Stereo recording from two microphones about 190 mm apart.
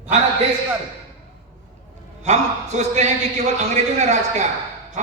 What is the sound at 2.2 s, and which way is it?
A man's voice, 35° right (ahead or behind).